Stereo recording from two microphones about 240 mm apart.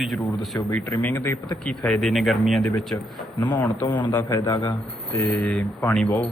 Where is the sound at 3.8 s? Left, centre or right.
Centre.